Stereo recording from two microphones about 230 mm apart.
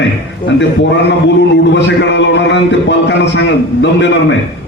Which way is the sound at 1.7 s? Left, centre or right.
Left.